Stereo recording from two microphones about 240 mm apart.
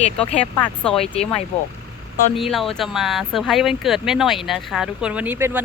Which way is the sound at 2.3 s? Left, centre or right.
Centre.